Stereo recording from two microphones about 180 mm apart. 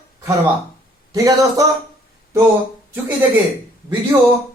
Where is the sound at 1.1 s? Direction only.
20° right (ahead or behind).